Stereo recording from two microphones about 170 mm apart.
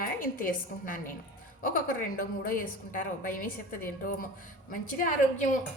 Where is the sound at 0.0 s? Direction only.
55° left (ahead or behind).